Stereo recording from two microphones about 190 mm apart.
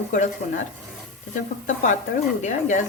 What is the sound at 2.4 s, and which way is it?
Speech, 40° left (ahead or behind).